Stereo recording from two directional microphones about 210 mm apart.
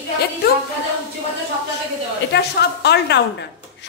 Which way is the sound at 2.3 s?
55° left (ahead or behind).